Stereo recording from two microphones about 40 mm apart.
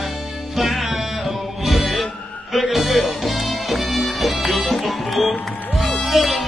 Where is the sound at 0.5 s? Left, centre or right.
Centre.